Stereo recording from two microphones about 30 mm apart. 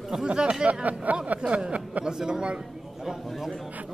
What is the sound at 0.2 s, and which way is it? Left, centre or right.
Speech, right.